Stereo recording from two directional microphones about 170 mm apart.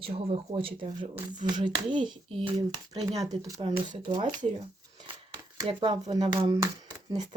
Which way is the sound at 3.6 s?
30° right (ahead or behind).